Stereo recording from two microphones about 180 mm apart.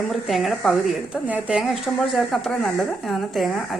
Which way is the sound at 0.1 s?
Centre (ahead or behind).